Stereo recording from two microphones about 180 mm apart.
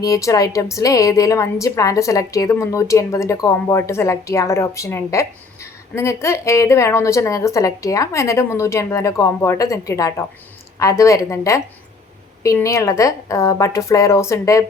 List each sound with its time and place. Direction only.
0.0 s a woman's voice: 20° left (ahead or behind)